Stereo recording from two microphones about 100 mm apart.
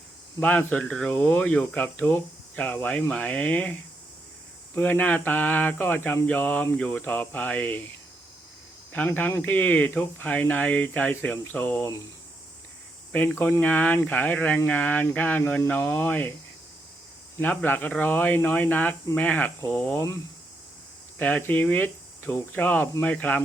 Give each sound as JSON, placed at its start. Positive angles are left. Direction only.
{"t": 0.3, "sound": "speech", "side_deg": 15}
{"t": 8.9, "sound": "speech", "side_deg": 20}
{"t": 13.1, "sound": "speech", "side_deg": 20}
{"t": 17.4, "sound": "speech", "side_deg": 20}
{"t": 21.2, "sound": "speech", "side_deg": 15}